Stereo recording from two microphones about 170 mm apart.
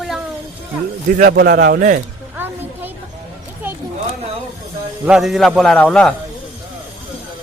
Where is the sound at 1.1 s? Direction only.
65° right (ahead or behind).